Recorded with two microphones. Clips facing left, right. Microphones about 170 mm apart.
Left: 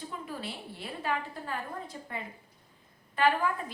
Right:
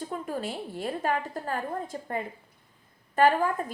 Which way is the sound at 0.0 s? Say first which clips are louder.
Right 6 dB; 45° right (ahead or behind).